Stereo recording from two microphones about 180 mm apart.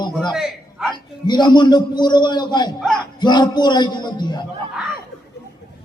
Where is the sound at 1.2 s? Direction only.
25° left (ahead or behind).